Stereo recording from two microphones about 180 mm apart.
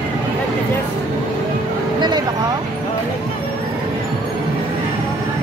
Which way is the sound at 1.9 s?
25° right (ahead or behind).